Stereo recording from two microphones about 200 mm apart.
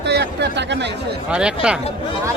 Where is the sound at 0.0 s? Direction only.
60° right (ahead or behind).